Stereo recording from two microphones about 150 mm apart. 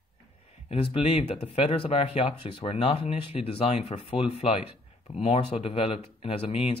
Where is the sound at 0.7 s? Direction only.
40° left (ahead or behind).